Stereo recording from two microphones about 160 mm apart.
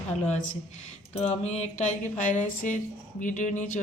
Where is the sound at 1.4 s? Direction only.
45° left (ahead or behind).